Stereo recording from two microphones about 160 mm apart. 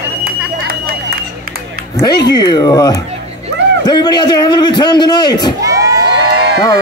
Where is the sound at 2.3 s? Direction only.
25° left (ahead or behind).